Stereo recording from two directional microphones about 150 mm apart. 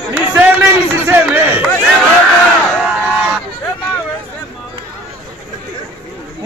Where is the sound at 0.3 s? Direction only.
10° right (ahead or behind).